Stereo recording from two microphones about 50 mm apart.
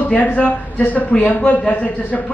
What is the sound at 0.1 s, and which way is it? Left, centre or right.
A man's voice, left.